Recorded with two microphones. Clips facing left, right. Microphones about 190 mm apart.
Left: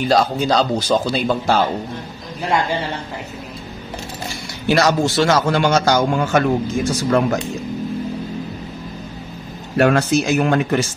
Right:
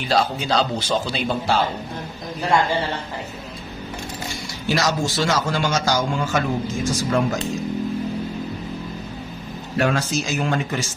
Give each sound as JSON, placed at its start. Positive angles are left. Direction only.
{"t": 0.1, "sound": "speech", "side_deg": 45}
{"t": 4.6, "sound": "a man's voice", "side_deg": 60}
{"t": 9.8, "sound": "a man's voice", "side_deg": 60}